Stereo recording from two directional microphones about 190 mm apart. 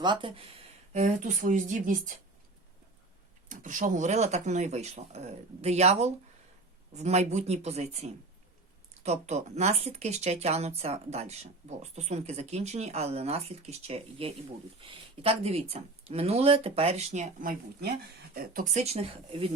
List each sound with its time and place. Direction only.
0.0 s speech: 25° right (ahead or behind); by 2.1 s 45° right (ahead or behind)
3.5 s speech: 45° right (ahead or behind)